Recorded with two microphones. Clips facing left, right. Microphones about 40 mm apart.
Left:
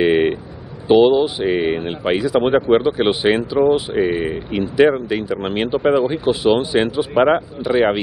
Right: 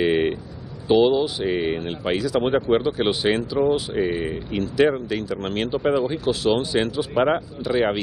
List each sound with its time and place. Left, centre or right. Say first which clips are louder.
0.0 s vehicle: left 5 dB; centre
0.8 s speech: left 5 dB; left